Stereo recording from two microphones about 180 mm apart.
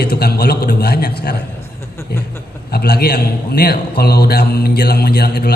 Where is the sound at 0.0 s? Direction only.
60° left (ahead or behind).